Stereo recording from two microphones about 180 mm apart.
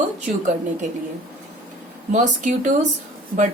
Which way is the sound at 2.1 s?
45° right (ahead or behind).